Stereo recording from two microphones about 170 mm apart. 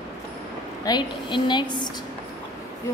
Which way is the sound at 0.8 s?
25° left (ahead or behind).